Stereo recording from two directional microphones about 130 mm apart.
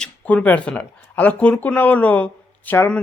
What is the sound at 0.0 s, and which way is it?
Speech, 10° left (ahead or behind).